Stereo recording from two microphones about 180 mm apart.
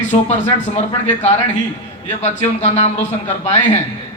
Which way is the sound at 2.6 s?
35° left (ahead or behind).